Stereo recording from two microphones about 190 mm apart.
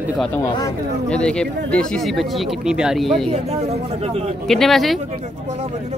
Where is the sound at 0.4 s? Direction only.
15° left (ahead or behind).